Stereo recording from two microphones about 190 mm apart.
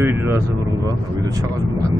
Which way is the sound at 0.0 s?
10° right (ahead or behind).